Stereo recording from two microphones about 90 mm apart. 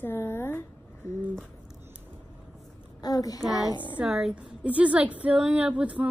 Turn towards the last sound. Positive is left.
turn(degrees=-15)  # may be behind; listen again after turning